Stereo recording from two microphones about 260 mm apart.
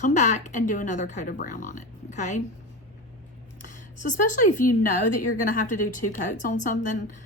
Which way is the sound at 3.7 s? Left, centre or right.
Left.